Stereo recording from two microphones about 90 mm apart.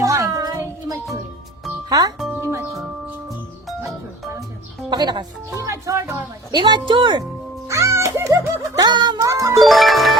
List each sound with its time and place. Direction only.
0.0 s music: 35° right (ahead or behind)
1.9 s speech: 45° right (ahead or behind)
2.4 s music: 30° right (ahead or behind)
4.9 s music: 55° right (ahead or behind)
5.6 s music: 35° right (ahead or behind)
6.5 s a woman's voice: 60° right (ahead or behind)
7.7 s music: 35° right (ahead or behind)
8.7 s music: 50° right (ahead or behind)
9.1 s music: 35° right (ahead or behind)
9.6 s music: centre (ahead or behind)